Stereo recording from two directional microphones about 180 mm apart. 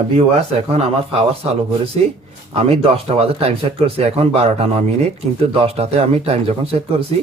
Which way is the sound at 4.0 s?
35° right (ahead or behind).